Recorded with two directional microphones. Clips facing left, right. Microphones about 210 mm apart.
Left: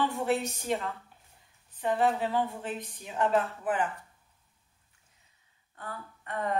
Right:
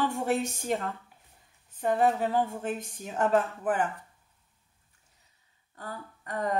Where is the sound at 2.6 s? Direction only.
45° right (ahead or behind).